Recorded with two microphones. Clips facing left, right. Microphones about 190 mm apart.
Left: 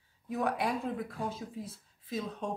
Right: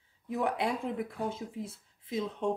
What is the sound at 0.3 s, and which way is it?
Speech, 20° right (ahead or behind).